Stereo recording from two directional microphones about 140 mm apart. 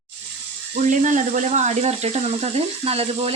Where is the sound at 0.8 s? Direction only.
60° right (ahead or behind); by 3.3 s 45° right (ahead or behind).